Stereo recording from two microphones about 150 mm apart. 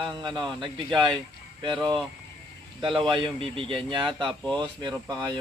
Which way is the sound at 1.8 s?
5° left (ahead or behind).